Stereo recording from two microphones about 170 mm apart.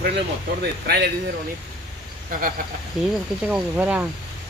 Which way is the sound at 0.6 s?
75° right (ahead or behind).